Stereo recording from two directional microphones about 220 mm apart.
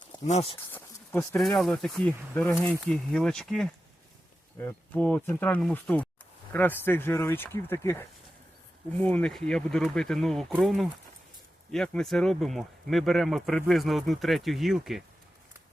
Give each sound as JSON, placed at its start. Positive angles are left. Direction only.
{"t": 0.3, "sound": "speech", "side_deg": 30}
{"t": 0.7, "sound": "speech", "side_deg": 10}